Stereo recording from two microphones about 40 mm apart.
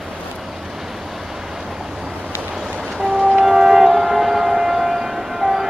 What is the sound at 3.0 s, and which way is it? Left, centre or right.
Music, centre.